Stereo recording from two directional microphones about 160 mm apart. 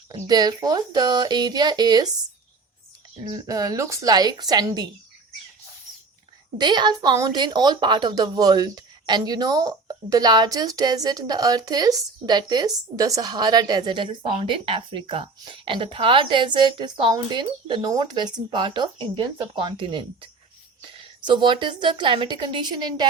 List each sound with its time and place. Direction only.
0.1 s a woman's voice: 25° right (ahead or behind)
3.2 s a woman's voice: 20° right (ahead or behind)
6.6 s a woman's voice: 30° right (ahead or behind)